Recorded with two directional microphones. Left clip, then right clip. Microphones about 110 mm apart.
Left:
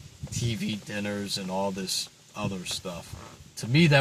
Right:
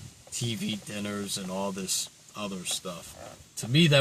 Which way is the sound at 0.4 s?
25° left (ahead or behind).